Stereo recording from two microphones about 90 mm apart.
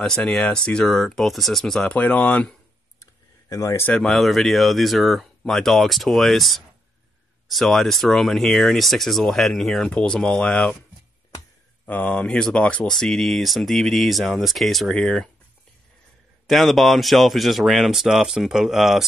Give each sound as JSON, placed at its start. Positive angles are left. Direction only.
{"t": 0.0, "sound": "speech", "side_deg": 5}
{"t": 3.0, "sound": "a sound", "side_deg": 40}
{"t": 4.0, "sound": "speech", "side_deg": 0}
{"t": 11.8, "sound": "speech", "side_deg": 15}
{"t": 16.4, "sound": "speech", "side_deg": 0}